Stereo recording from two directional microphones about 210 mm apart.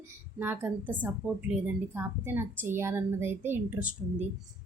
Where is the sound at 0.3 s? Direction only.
10° right (ahead or behind).